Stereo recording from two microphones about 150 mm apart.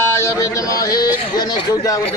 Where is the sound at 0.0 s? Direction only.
20° left (ahead or behind).